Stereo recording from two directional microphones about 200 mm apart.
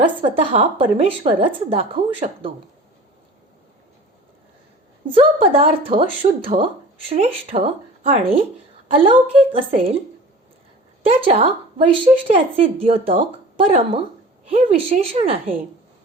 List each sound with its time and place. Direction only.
0.2 s a woman's voice: 30° right (ahead or behind)
5.0 s a woman's voice: 25° right (ahead or behind)
11.0 s a woman's voice: 30° right (ahead or behind)